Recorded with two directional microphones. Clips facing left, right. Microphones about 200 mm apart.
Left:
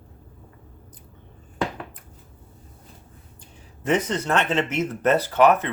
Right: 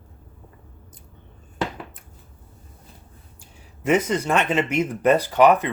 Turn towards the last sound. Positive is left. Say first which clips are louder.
# right 2 dB
turn(degrees=-15)  # may be behind; listen again after turning